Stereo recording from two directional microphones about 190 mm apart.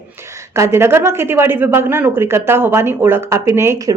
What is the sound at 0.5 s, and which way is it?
Speech, 15° right (ahead or behind).